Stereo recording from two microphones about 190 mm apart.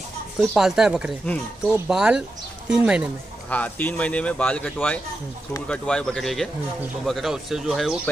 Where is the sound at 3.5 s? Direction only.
10° left (ahead or behind).